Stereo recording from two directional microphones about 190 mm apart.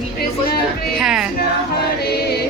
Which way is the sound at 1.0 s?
5° right (ahead or behind).